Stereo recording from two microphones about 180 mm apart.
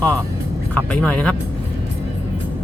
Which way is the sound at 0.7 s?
5° left (ahead or behind).